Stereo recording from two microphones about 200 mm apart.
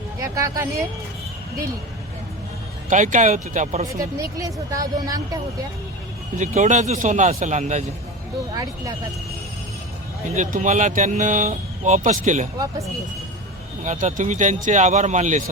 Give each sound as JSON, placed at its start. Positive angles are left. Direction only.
{"t": 0.2, "sound": "speech", "side_deg": -15}
{"t": 2.9, "sound": "speech", "side_deg": -40}
{"t": 3.9, "sound": "speech", "side_deg": -15}
{"t": 6.3, "sound": "speech", "side_deg": -40}
{"t": 8.5, "sound": "speech", "side_deg": -20}
{"t": 10.3, "sound": "speech", "side_deg": -40}
{"t": 13.8, "sound": "speech", "side_deg": -40}